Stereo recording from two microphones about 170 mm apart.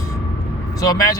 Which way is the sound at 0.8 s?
20° left (ahead or behind).